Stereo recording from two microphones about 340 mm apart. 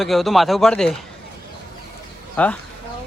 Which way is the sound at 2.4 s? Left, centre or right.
Centre.